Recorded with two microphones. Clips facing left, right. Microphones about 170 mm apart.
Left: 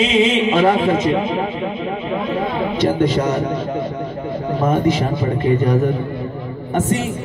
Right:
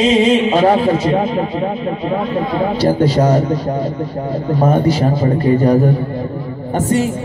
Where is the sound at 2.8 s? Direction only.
35° right (ahead or behind).